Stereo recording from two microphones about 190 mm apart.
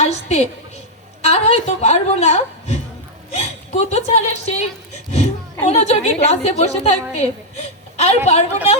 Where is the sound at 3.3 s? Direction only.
35° left (ahead or behind).